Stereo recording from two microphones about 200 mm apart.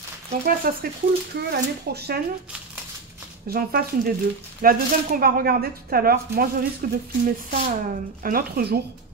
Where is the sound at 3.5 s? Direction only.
50° right (ahead or behind).